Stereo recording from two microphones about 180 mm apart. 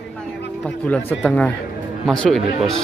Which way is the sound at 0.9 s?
5° left (ahead or behind).